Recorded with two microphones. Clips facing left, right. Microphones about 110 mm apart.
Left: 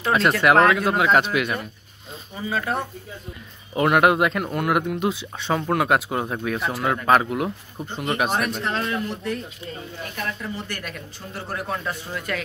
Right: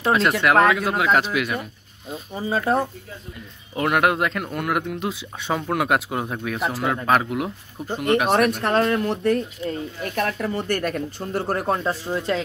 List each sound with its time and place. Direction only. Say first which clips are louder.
0.0 s speech: even; centre (ahead or behind)
2.3 s speech: right 4 dB; 30° right (ahead or behind)
3.7 s speech: left 2 dB; centre (ahead or behind)
8.3 s speech: right 6 dB; 60° right (ahead or behind)
11.6 s speech: right 5 dB; 30° right (ahead or behind)